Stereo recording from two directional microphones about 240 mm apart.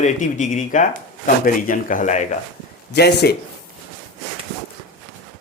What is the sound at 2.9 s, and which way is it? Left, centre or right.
Speech, left.